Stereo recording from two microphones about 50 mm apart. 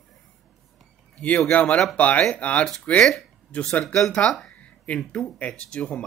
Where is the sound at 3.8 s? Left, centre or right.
Centre.